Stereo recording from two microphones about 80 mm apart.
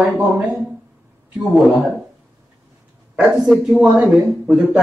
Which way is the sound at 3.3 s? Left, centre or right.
Centre.